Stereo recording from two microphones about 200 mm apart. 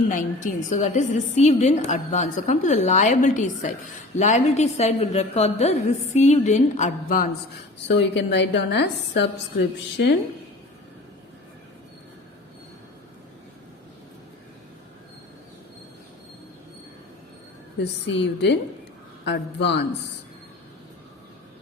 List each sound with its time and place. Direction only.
0.1 s a woman's voice: 40° left (ahead or behind)
7.9 s a woman's voice: 60° left (ahead or behind)
17.7 s a woman's voice: 60° left (ahead or behind)